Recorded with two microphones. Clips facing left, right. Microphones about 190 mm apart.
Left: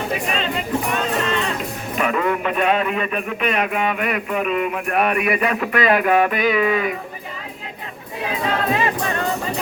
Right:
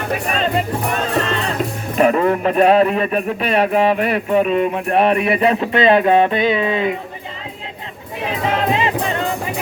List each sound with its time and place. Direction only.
0.1 s speech: 45° right (ahead or behind)
1.2 s music: 35° right (ahead or behind)
2.0 s speech: 35° right (ahead or behind)
8.3 s music: 20° right (ahead or behind)